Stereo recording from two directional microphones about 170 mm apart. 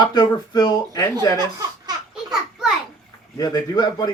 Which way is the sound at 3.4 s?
25° left (ahead or behind).